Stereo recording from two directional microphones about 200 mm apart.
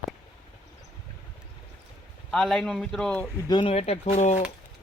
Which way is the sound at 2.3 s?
Centre (ahead or behind).